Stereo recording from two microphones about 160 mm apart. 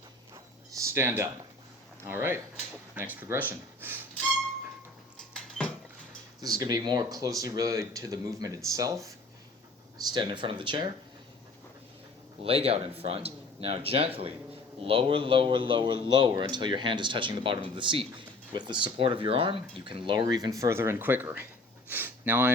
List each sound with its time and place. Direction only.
0.8 s speech: 15° right (ahead or behind)
3.8 s a sound: 15° right (ahead or behind)
5.1 s dishes: 5° left (ahead or behind)
6.4 s speech: 25° right (ahead or behind)
10.1 s speech: 30° right (ahead or behind)
12.4 s a man's voice: 35° right (ahead or behind); by 21.4 s 10° right (ahead or behind)
21.8 s a sound: 10° right (ahead or behind)